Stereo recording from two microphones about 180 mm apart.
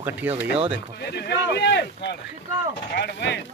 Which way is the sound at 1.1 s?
65° left (ahead or behind).